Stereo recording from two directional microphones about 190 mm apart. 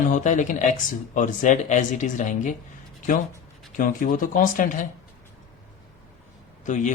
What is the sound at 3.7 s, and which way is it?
Speech, 45° left (ahead or behind).